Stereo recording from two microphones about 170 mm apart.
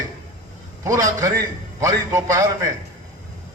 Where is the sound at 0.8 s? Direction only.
20° right (ahead or behind).